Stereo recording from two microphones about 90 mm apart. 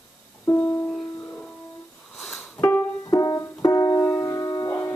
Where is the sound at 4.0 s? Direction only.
25° left (ahead or behind).